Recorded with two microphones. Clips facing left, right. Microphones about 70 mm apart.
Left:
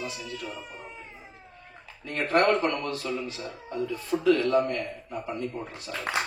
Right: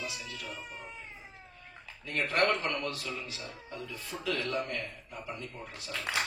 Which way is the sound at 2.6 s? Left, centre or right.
Left.